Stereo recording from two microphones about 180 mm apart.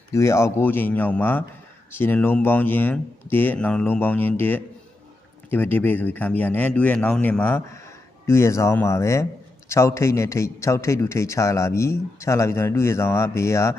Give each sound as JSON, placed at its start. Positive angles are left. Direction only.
{"t": 0.1, "sound": "speech", "side_deg": 15}